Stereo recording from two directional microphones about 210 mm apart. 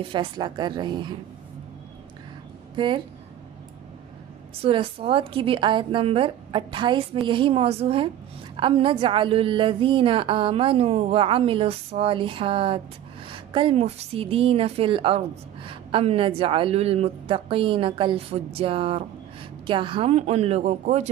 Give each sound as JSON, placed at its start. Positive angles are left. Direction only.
{"t": 0.1, "sound": "a woman's voice", "side_deg": -20}
{"t": 2.7, "sound": "speech", "side_deg": -25}
{"t": 4.6, "sound": "a woman's voice", "side_deg": -25}